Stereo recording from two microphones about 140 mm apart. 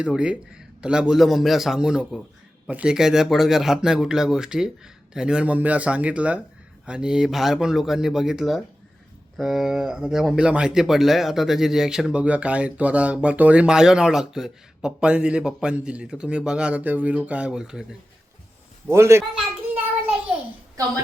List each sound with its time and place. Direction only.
0.0 s speech: 5° right (ahead or behind)
18.9 s a man's voice: 20° right (ahead or behind)